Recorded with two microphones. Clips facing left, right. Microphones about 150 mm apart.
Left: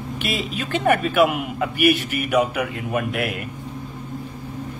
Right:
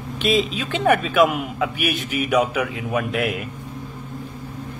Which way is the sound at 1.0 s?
Centre (ahead or behind).